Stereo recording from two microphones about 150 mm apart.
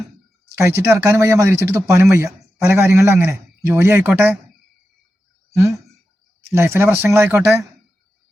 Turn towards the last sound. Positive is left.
turn(degrees=-15)  # may be behind; listen again after turning